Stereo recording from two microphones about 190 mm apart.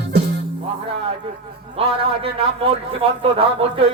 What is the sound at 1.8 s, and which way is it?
Speech, 30° right (ahead or behind).